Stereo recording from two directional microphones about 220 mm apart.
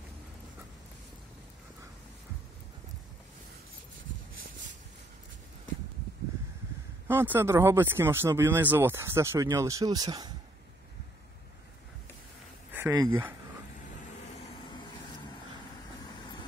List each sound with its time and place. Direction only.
7.1 s speech: 10° right (ahead or behind)
12.7 s speech: 10° right (ahead or behind)
14.7 s vehicle: 20° left (ahead or behind)